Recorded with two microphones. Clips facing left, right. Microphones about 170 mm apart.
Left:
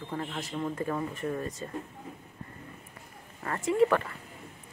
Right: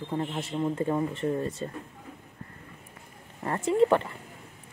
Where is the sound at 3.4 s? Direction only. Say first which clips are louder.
Right 2 dB; 30° right (ahead or behind).